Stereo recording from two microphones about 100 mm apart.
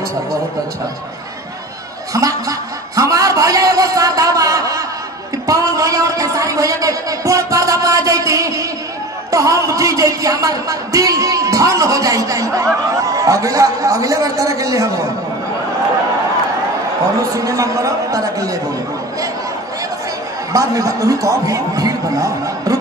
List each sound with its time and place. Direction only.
2.1 s chuckle: 35° right (ahead or behind)
3.0 s a sound: 35° right (ahead or behind)
9.3 s a woman's voice: 35° right (ahead or behind)
17.2 s a man's voice: 35° right (ahead or behind)
20.5 s a man's voice: 35° right (ahead or behind)